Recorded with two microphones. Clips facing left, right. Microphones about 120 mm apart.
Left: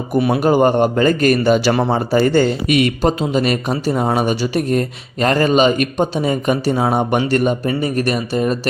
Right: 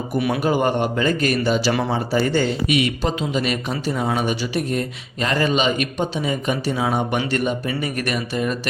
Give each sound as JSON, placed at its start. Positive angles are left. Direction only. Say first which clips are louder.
{"t": 0.1, "sound": "speech", "louder": "left 6 dB", "side_deg": 40}
{"t": 1.7, "sound": "speech", "louder": "left 5 dB", "side_deg": 40}